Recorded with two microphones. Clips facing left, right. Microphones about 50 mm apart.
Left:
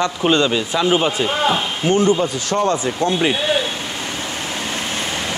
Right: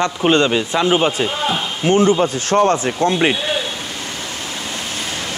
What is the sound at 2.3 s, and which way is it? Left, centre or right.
Speech, right.